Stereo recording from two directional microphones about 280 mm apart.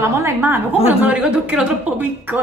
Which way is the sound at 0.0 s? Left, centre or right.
Centre.